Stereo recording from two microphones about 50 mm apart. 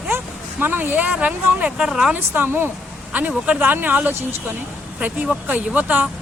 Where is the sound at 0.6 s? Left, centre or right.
Right.